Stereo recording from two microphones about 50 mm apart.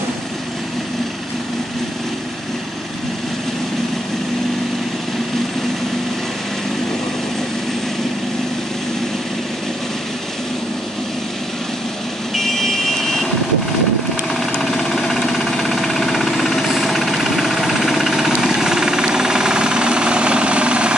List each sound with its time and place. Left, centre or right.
12.4 s vehicle: centre
14.6 s jackhammer: centre; by 20.9 s right